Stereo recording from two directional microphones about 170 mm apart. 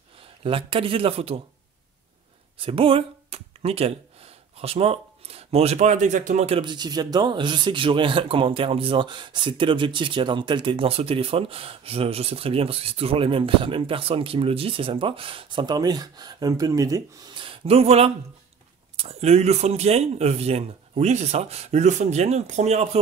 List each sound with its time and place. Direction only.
0.4 s speech: 30° right (ahead or behind)
2.6 s speech: 35° right (ahead or behind)